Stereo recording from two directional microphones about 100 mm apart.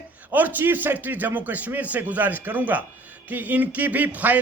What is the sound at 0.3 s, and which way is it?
A man's voice, 20° right (ahead or behind).